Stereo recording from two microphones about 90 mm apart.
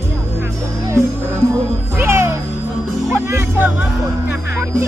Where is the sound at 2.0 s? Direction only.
30° right (ahead or behind).